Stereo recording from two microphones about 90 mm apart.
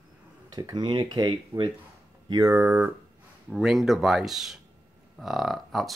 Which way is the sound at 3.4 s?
5° right (ahead or behind).